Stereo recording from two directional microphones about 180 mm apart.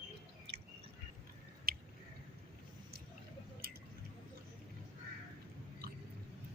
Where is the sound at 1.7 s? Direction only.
60° right (ahead or behind).